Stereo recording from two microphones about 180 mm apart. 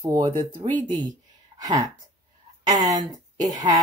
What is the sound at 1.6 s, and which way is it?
Speech, 20° right (ahead or behind).